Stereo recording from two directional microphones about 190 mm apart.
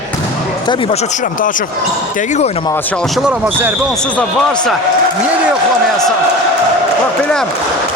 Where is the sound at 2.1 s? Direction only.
40° left (ahead or behind).